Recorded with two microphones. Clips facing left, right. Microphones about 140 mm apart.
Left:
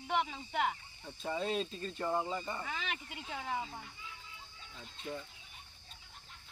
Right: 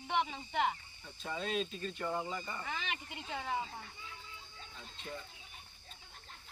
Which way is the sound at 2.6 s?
Centre (ahead or behind).